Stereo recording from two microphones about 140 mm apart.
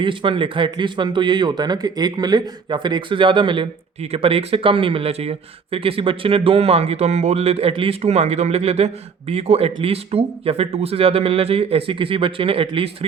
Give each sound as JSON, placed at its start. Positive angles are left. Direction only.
{"t": 0.0, "sound": "speech", "side_deg": -35}